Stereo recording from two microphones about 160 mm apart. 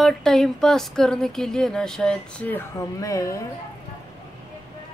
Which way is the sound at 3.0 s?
20° left (ahead or behind).